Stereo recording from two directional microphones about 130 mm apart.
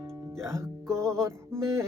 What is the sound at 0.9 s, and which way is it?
Music, 20° right (ahead or behind).